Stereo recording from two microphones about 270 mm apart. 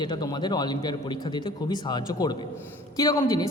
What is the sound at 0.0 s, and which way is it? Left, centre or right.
A woman's voice, centre.